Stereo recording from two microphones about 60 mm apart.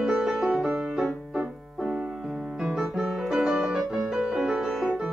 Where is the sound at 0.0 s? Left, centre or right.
Centre.